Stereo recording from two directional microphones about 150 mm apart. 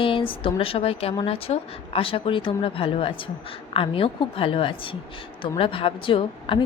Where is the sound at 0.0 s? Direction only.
35° left (ahead or behind).